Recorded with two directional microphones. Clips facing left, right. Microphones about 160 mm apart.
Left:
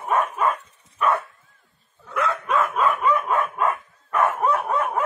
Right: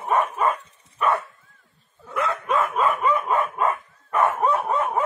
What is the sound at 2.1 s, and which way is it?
Dog, centre (ahead or behind).